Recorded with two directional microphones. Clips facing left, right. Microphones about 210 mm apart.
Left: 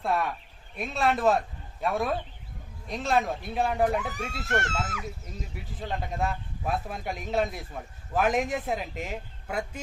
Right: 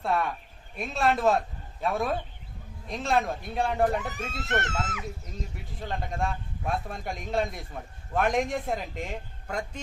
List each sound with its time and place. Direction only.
0.0 s a man's voice: centre (ahead or behind)
4.3 s speech: 20° right (ahead or behind)
5.6 s a man's voice: centre (ahead or behind)